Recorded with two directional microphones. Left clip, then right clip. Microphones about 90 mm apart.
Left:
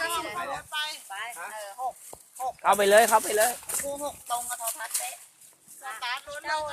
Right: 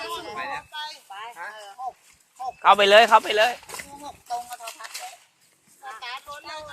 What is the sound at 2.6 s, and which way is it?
Speech, 10° right (ahead or behind).